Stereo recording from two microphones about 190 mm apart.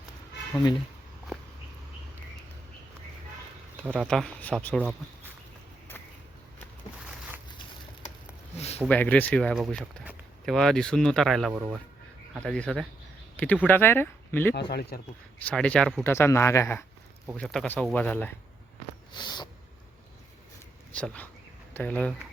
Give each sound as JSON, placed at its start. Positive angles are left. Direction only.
{"t": 4.0, "sound": "speech", "side_deg": 5}
{"t": 8.5, "sound": "a sound", "side_deg": 35}
{"t": 8.9, "sound": "speech", "side_deg": 10}
{"t": 14.7, "sound": "speech", "side_deg": 55}
{"t": 15.4, "sound": "speech", "side_deg": 5}
{"t": 19.1, "sound": "a sound", "side_deg": 25}
{"t": 20.9, "sound": "speech", "side_deg": 5}